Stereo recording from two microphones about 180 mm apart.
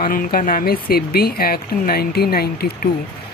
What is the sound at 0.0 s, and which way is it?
Speech, 50° left (ahead or behind).